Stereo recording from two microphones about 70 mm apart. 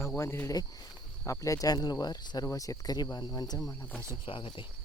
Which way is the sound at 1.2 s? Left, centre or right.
Left.